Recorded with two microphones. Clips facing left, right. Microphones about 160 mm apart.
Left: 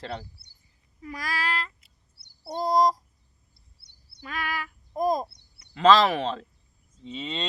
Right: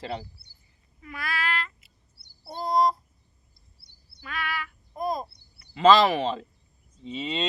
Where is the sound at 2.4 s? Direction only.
35° left (ahead or behind).